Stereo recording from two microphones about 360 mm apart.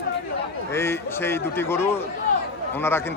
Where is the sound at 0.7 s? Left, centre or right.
Centre.